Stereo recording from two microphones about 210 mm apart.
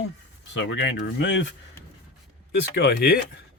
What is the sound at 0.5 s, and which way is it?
Speech, 60° left (ahead or behind).